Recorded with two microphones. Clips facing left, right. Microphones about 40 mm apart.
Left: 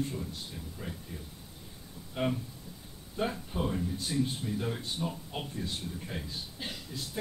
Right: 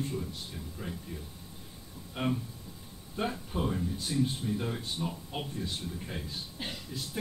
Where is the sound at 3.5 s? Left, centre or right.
Centre.